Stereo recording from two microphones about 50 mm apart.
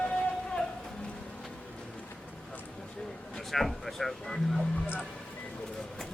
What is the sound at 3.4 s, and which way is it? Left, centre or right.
Speech, centre.